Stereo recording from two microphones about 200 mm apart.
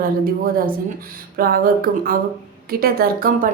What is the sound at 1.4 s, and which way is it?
A woman's voice, 45° right (ahead or behind).